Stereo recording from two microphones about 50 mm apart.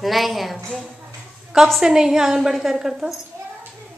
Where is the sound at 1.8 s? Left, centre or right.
Centre.